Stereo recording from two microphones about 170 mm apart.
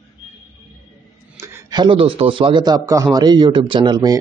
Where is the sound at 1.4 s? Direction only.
15° right (ahead or behind).